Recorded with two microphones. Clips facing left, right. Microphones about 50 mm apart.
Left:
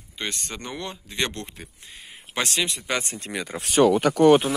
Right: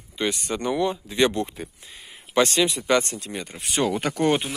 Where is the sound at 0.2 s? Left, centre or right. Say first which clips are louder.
Right 7 dB; centre.